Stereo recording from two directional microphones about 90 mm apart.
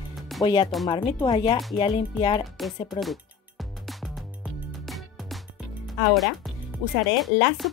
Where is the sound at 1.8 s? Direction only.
75° left (ahead or behind).